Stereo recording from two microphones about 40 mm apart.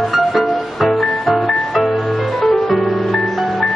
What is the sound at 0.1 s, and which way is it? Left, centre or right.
Music, centre.